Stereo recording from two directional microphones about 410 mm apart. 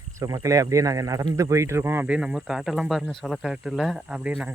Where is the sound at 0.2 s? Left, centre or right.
Centre.